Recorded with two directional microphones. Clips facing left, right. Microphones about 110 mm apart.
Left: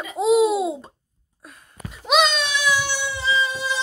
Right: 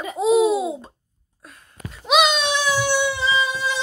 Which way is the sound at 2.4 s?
35° right (ahead or behind).